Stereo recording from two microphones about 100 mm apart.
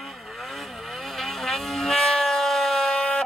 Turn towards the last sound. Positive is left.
turn(degrees=10)  # may be behind; listen again after turning